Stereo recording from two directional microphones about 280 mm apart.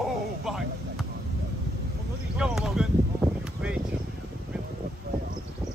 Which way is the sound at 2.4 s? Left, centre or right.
Centre.